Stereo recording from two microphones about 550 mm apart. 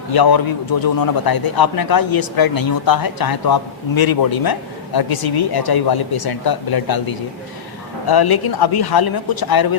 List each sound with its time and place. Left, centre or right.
0.1 s a man's voice: left